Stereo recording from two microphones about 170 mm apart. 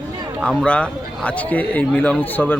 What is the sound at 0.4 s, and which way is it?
A man's voice, 5° left (ahead or behind).